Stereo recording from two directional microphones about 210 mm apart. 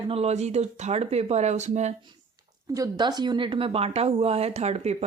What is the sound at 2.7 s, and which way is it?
Speech, 20° right (ahead or behind).